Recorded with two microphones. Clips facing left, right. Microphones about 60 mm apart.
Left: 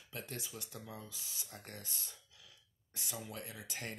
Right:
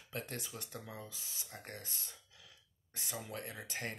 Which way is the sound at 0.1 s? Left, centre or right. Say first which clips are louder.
Right 2 dB; right.